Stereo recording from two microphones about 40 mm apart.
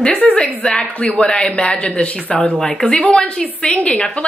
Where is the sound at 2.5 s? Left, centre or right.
Centre.